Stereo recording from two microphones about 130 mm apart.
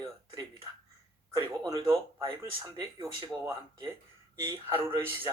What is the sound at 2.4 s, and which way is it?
Speech, 25° right (ahead or behind).